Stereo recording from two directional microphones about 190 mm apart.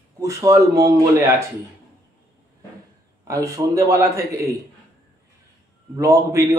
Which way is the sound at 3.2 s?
15° right (ahead or behind).